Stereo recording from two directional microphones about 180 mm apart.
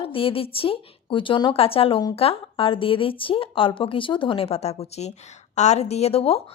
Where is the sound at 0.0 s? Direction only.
30° left (ahead or behind).